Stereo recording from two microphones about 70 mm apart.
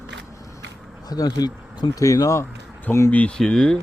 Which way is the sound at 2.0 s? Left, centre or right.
Left.